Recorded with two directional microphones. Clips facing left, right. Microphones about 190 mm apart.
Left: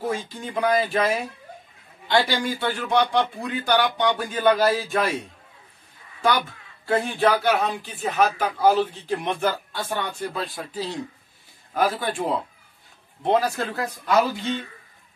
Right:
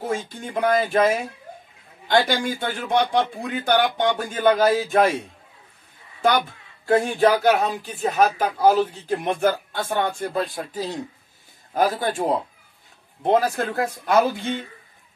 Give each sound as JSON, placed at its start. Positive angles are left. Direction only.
{"t": 0.5, "sound": "speech", "side_deg": -45}
{"t": 6.9, "sound": "speech", "side_deg": -45}
{"t": 13.3, "sound": "speech", "side_deg": -50}